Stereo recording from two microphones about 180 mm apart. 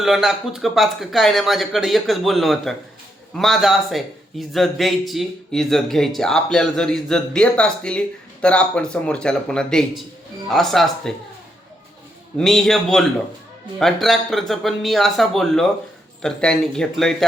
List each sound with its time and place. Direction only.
0.0 s a man's voice: centre (ahead or behind)
12.4 s a man's voice: centre (ahead or behind)